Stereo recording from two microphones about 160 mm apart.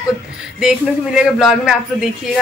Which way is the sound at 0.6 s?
5° right (ahead or behind).